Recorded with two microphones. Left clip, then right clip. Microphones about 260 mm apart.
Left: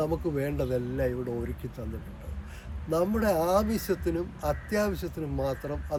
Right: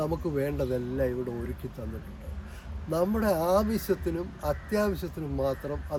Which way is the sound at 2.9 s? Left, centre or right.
Centre.